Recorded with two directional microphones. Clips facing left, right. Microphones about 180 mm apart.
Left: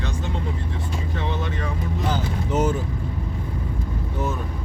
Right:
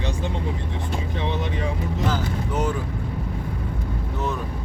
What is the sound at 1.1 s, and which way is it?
Speech, 15° right (ahead or behind).